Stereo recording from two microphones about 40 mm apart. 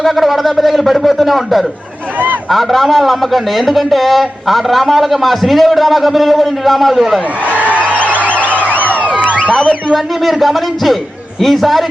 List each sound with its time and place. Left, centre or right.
0.0 s a man's voice: centre
7.5 s speech: right
7.8 s a sound: left
9.9 s a man's voice: centre